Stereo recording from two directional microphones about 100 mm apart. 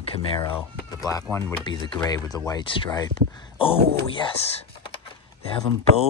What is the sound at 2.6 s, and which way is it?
Speech, 55° left (ahead or behind).